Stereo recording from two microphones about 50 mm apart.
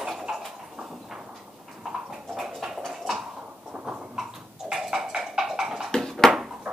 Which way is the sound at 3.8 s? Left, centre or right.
Centre.